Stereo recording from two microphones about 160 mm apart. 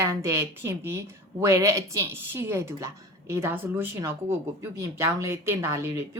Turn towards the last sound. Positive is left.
turn(degrees=-15)  # may be behind; listen again after turning